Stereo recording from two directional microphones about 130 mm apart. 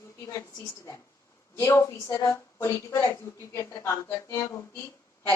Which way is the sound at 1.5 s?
20° left (ahead or behind).